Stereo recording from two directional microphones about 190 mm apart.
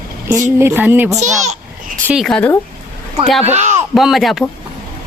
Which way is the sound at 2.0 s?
Centre (ahead or behind).